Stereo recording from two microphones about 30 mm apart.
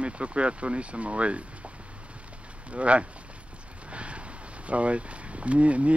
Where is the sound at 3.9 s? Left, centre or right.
Right.